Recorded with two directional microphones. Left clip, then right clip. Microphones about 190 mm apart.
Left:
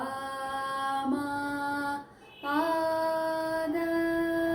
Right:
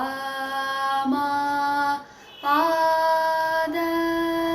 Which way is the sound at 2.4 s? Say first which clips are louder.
Right 8 dB; 15° left (ahead or behind).